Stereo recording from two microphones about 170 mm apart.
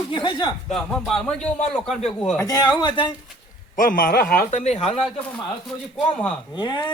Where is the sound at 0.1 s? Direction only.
30° left (ahead or behind).